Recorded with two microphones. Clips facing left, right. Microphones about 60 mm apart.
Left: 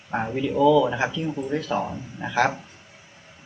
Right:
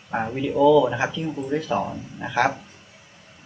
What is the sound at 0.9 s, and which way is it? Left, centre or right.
Speech, centre.